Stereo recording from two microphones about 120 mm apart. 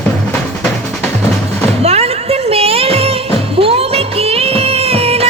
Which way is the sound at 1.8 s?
60° right (ahead or behind).